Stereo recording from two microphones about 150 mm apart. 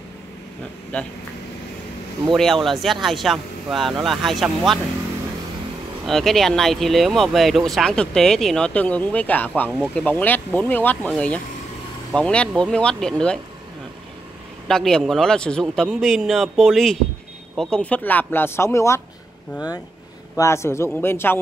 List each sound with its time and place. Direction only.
0.9 s speech: 10° left (ahead or behind)
2.3 s speech: centre (ahead or behind)
6.0 s speech: centre (ahead or behind)
14.7 s speech: 5° left (ahead or behind)
20.3 s speech: 20° left (ahead or behind)